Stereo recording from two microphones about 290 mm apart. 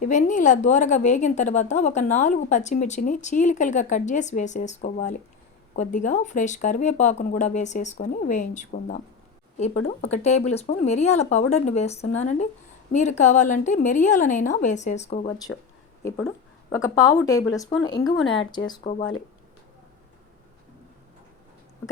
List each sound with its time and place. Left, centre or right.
0.0 s a woman's voice: left
16.0 s a woman's voice: centre